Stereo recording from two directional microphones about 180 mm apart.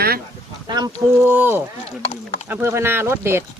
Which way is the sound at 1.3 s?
10° right (ahead or behind).